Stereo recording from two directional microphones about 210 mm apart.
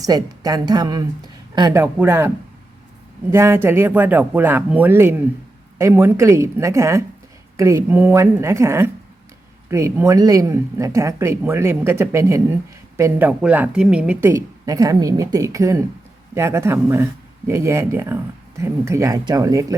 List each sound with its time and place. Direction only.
0.0 s speech: 20° right (ahead or behind)